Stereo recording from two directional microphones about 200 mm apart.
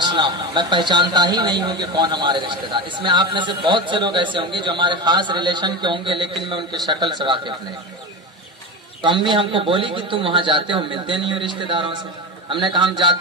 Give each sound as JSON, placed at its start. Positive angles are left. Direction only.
{"t": 0.0, "sound": "a man's voice", "side_deg": -25}
{"t": 9.0, "sound": "a man's voice", "side_deg": -25}